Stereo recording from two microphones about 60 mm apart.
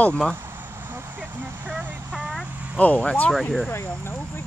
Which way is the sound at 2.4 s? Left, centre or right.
Right.